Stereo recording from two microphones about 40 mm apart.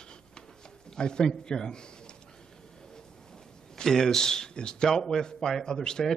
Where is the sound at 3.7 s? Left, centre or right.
Centre.